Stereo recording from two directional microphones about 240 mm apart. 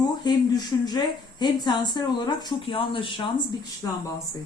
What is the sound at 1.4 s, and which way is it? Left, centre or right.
Speech, centre.